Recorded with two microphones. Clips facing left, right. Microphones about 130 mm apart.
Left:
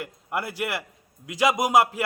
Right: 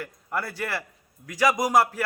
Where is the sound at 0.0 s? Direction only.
20° left (ahead or behind).